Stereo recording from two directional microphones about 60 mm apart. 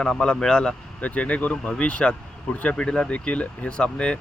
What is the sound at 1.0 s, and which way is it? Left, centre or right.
Speech, left.